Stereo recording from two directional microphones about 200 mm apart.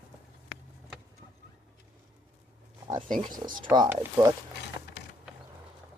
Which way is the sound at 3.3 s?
20° right (ahead or behind).